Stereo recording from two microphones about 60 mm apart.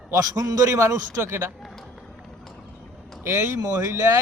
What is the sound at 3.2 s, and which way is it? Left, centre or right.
Speech, right.